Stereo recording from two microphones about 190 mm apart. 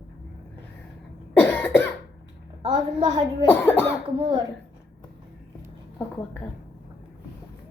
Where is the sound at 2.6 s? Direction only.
25° right (ahead or behind).